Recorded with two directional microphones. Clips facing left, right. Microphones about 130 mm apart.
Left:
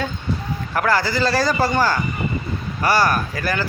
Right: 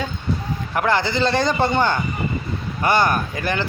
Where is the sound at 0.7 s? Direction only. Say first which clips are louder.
Even; 20° right (ahead or behind).